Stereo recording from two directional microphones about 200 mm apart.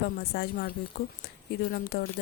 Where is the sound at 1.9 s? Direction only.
50° left (ahead or behind).